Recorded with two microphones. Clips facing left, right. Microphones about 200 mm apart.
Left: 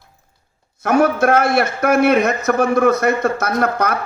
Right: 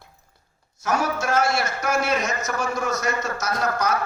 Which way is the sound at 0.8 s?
60° left (ahead or behind).